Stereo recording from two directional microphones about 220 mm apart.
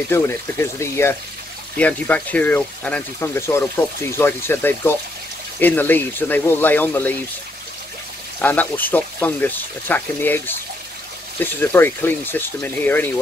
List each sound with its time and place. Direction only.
0.1 s speech: 10° left (ahead or behind)
8.4 s speech: 10° left (ahead or behind)